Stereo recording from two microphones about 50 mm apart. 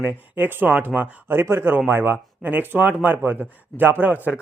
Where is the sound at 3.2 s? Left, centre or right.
Right.